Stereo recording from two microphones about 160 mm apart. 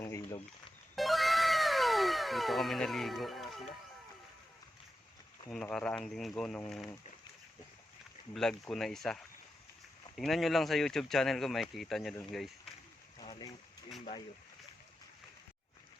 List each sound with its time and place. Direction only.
0.0 s a sound: 15° left (ahead or behind)
0.9 s cat: centre (ahead or behind)
5.5 s speech: 5° left (ahead or behind)
8.3 s speech: 5° left (ahead or behind)
10.2 s speech: centre (ahead or behind)
13.1 s a sound: 30° left (ahead or behind)